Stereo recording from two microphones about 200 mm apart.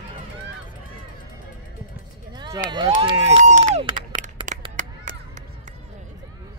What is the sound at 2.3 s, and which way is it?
Run, 20° right (ahead or behind).